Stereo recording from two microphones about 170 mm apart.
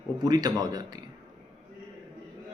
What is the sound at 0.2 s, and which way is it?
Speech, 25° right (ahead or behind).